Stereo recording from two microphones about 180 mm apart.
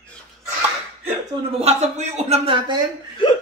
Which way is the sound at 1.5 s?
35° right (ahead or behind).